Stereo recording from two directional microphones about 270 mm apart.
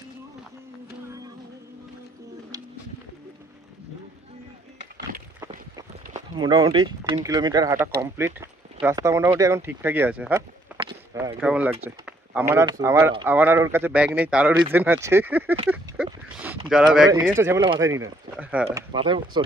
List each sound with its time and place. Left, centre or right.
4.7 s a sound: right
6.3 s speech: centre
10.8 s a sound: centre
11.8 s speech: centre
16.6 s speech: centre
17.4 s speech: centre
18.9 s speech: centre